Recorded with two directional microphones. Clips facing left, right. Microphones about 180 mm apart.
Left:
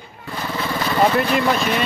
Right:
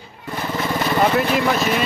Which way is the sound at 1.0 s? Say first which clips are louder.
Left 2 dB; 5° right (ahead or behind).